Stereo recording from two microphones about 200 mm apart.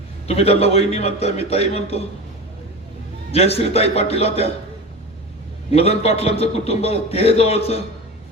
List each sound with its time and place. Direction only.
0.3 s a man's voice: 30° left (ahead or behind)
3.3 s a man's voice: 30° left (ahead or behind)
5.7 s a man's voice: 30° left (ahead or behind)